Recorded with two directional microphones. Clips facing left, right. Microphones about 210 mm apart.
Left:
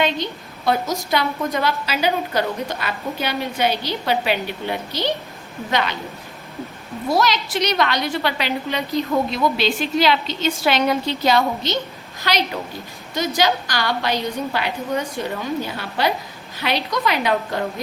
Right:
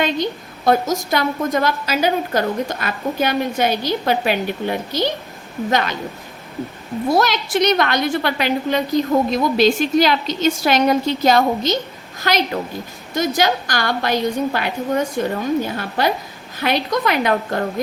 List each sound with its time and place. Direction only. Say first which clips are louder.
0.0 s a woman's voice: right 2 dB; 45° right (ahead or behind)
7.1 s a woman's voice: right 2 dB; 50° right (ahead or behind)